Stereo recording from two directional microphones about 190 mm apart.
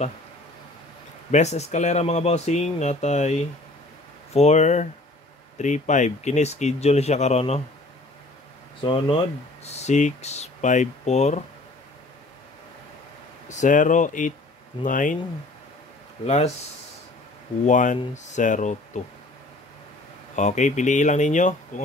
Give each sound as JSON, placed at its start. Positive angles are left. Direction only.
{"t": 1.3, "sound": "speech", "side_deg": 35}
{"t": 8.8, "sound": "speech", "side_deg": 25}
{"t": 13.5, "sound": "speech", "side_deg": 40}
{"t": 16.3, "sound": "speech", "side_deg": 35}
{"t": 17.6, "sound": "speech", "side_deg": 40}
{"t": 20.3, "sound": "speech", "side_deg": 40}